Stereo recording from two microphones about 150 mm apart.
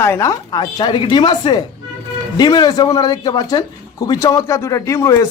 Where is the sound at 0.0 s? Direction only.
20° left (ahead or behind).